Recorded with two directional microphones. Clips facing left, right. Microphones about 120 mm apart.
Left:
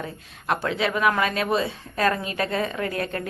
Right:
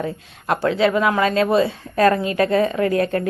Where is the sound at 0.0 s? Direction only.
30° right (ahead or behind).